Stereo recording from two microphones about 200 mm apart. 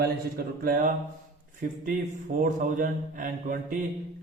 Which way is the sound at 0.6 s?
45° right (ahead or behind).